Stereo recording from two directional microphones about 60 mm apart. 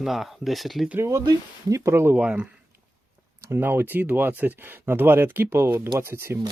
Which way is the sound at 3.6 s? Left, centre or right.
Right.